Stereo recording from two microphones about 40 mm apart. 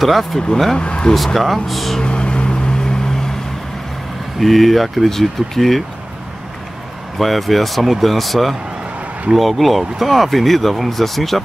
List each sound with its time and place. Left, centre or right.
0.0 s speech: centre
0.7 s speech: left
1.1 s speech: centre
2.0 s vehicle: left
4.4 s speech: centre
7.2 s speech: centre